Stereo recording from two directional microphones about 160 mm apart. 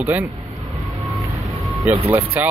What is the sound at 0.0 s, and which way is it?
Speech, 10° right (ahead or behind).